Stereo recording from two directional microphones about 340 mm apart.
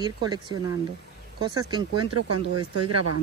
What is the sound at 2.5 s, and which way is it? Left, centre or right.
Speech, right.